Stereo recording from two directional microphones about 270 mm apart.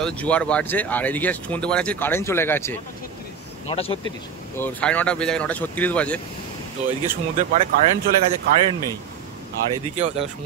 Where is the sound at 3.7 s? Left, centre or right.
Left.